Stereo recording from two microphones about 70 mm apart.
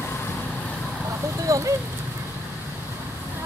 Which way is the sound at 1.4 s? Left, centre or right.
Right.